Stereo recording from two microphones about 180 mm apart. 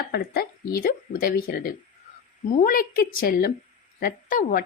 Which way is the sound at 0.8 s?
50° left (ahead or behind).